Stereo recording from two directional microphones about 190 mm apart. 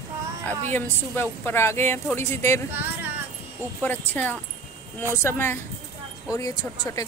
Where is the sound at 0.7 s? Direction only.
10° left (ahead or behind).